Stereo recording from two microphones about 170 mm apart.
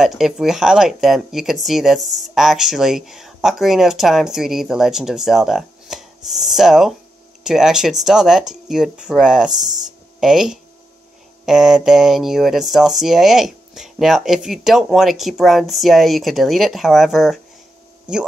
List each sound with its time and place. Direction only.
0.0 s speech: centre (ahead or behind)